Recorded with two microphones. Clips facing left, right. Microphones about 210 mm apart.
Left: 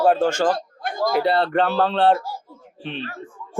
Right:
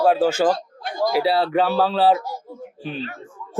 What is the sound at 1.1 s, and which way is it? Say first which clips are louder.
A man's voice: even; centre (ahead or behind).